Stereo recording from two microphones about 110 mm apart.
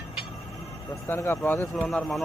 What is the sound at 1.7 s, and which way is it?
Speech, 5° left (ahead or behind).